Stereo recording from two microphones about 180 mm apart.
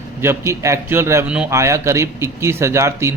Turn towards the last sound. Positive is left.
turn(degrees=-15)  # may be behind; listen again after turning